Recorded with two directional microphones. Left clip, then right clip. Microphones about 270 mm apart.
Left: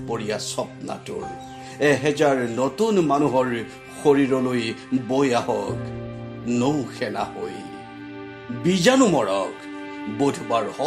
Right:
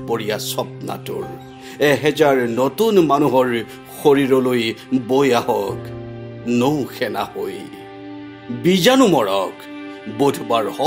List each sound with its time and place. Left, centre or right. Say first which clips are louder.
0.1 s speech: right 5 dB; right
8.6 s speech: right 4 dB; right